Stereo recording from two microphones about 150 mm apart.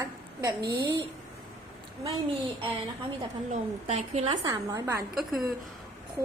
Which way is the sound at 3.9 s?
40° right (ahead or behind).